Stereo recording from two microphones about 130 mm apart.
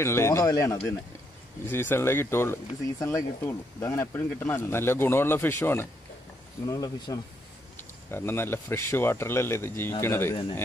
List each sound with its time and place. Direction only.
0.0 s speech: 20° left (ahead or behind)
6.6 s speech: 30° left (ahead or behind)
8.1 s speech: 20° left (ahead or behind)